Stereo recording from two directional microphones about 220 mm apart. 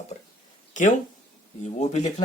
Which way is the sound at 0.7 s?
35° left (ahead or behind).